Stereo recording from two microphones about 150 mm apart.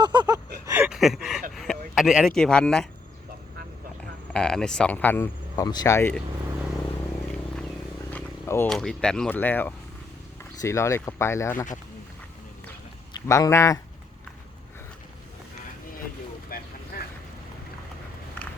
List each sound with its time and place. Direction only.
0.0 s a sound: 30° right (ahead or behind)
0.9 s a sound: centre (ahead or behind)
2.0 s speech: centre (ahead or behind)
4.3 s speech: 5° left (ahead or behind)
8.1 s a sound: 15° left (ahead or behind)
8.7 s speech: 5° left (ahead or behind)
13.1 s speech: 20° left (ahead or behind)
16.5 s boat: 80° left
16.9 s boat: 90° left